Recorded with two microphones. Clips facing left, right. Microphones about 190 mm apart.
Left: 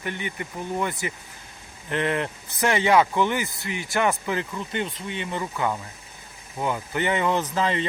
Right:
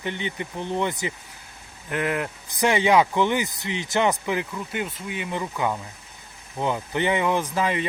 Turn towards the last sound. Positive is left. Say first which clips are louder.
# even
turn(degrees=-10)  # may be behind; listen again after turning